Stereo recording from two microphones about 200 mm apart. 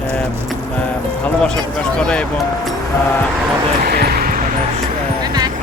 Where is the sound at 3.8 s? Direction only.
50° right (ahead or behind).